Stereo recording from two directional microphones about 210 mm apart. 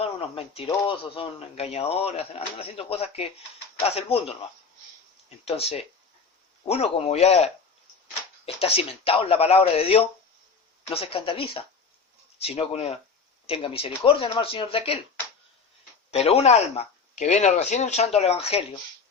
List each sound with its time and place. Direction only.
0.0 s speech: 25° left (ahead or behind)
5.5 s speech: 30° left (ahead or behind)
16.1 s speech: 30° left (ahead or behind)